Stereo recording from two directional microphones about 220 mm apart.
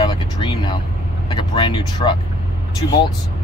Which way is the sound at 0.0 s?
20° left (ahead or behind).